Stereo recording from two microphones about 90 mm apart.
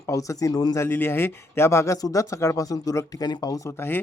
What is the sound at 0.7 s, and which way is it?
Speech, 25° left (ahead or behind).